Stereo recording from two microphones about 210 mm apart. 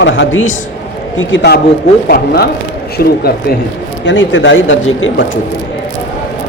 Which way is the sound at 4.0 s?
60° left (ahead or behind).